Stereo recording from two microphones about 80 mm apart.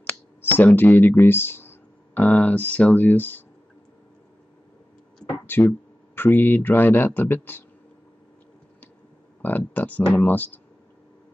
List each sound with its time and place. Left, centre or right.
0.5 s speech: left
5.5 s speech: left
9.4 s speech: left